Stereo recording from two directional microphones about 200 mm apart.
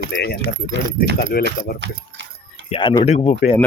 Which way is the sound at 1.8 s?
60° right (ahead or behind).